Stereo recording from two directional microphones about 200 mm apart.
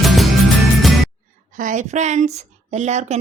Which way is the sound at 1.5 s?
40° right (ahead or behind).